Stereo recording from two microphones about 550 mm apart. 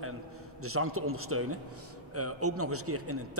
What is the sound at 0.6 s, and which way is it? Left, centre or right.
A man's voice, right.